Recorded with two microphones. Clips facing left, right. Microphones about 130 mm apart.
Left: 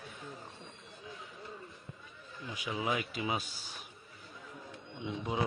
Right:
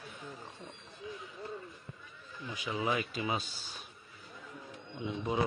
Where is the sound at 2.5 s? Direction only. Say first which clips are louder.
Right 1 dB; 10° left (ahead or behind).